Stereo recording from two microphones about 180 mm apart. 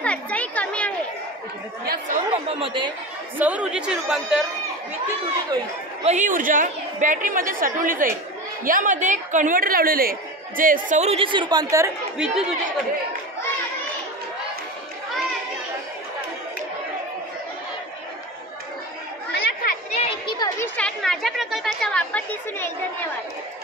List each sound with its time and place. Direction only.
0.0 s a sound: 5° left (ahead or behind)
1.9 s chatter: 45° right (ahead or behind)
2.3 s speech: 30° right (ahead or behind)
3.3 s a woman's voice: 10° right (ahead or behind)
6.0 s a woman's voice: 45° right (ahead or behind); by 11.9 s 20° right (ahead or behind)
12.2 s a woman's voice: 5° right (ahead or behind)
19.3 s chatter: 65° left (ahead or behind)
20.0 s a sound: 25° left (ahead or behind)
20.6 s chatter: 5° left (ahead or behind)